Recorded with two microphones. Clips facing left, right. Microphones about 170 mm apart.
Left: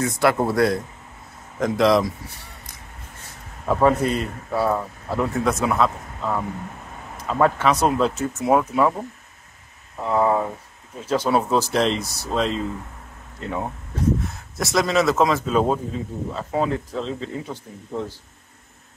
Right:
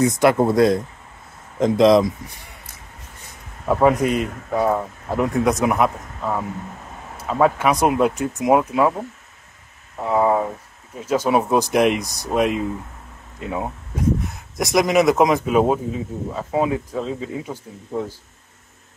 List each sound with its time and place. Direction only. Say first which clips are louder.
0.0 s speech: right 4 dB; 20° right (ahead or behind)
10.0 s speech: right 2 dB; 10° right (ahead or behind)